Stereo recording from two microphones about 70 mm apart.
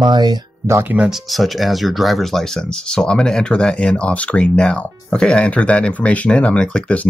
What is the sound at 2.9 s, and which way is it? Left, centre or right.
Speech, centre.